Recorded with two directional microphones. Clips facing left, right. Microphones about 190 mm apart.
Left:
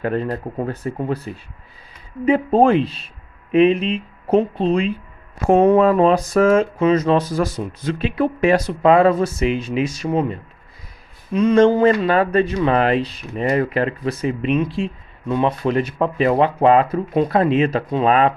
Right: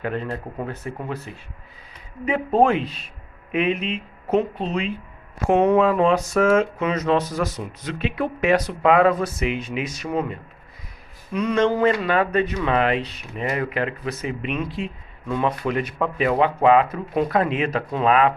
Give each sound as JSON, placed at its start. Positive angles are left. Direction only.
{"t": 0.0, "sound": "speech", "side_deg": 40}
{"t": 11.3, "sound": "speech", "side_deg": 30}